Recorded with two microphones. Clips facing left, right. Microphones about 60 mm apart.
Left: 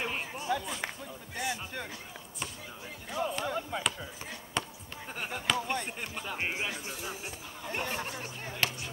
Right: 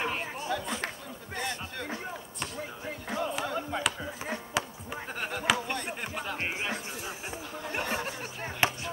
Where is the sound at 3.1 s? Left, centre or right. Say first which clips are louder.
Even; right.